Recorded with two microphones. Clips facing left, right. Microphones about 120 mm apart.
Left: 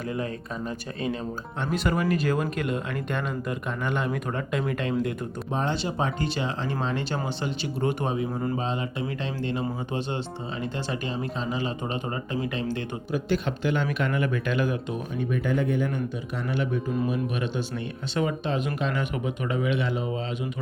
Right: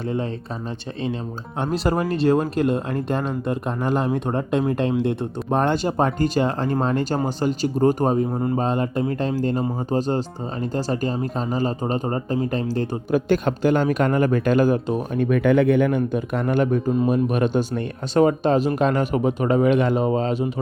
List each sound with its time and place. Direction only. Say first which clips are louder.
1.7 s speech: right 3 dB; 35° right (ahead or behind)
5.5 s speech: right 8 dB; 55° right (ahead or behind)
8.3 s speech: right 5 dB; 25° right (ahead or behind)
8.5 s speech: right 7 dB; 50° right (ahead or behind)
15.1 s speech: right 9 dB; 60° right (ahead or behind); by 20.5 s 40° right (ahead or behind)